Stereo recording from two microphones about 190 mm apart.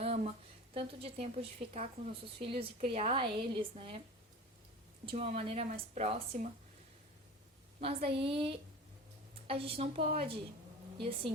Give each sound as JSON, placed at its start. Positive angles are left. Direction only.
{"t": 0.0, "sound": "a sound", "side_deg": -35}
{"t": 0.7, "sound": "speech", "side_deg": -30}
{"t": 5.0, "sound": "a woman's voice", "side_deg": -35}
{"t": 7.8, "sound": "a woman's voice", "side_deg": -30}